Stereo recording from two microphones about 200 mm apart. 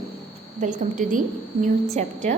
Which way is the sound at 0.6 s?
40° right (ahead or behind).